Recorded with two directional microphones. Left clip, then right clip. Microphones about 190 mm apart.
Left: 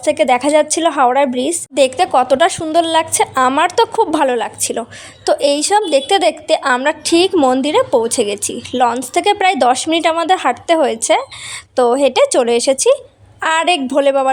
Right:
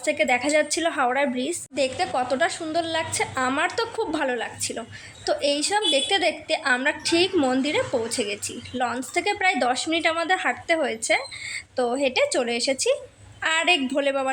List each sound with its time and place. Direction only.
0.0 s a woman's voice: 40° left (ahead or behind)